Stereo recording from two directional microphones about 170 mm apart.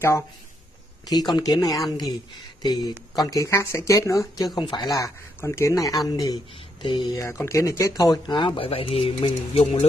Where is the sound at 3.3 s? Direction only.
20° left (ahead or behind).